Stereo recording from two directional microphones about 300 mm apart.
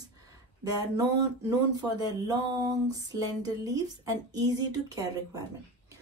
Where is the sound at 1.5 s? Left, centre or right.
Centre.